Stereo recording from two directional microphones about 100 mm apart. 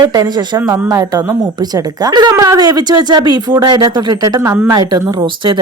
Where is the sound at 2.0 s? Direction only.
45° right (ahead or behind).